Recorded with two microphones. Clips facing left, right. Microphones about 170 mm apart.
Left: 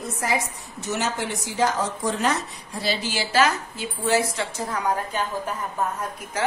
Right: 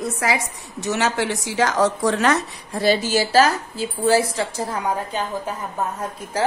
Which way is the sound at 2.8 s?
45° right (ahead or behind).